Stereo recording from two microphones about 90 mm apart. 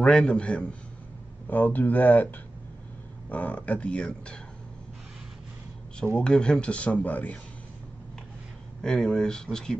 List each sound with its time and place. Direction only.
0.0 s speech: 10° left (ahead or behind)
3.3 s speech: 15° left (ahead or behind)
6.1 s speech: 10° left (ahead or behind)
8.8 s speech: 5° left (ahead or behind)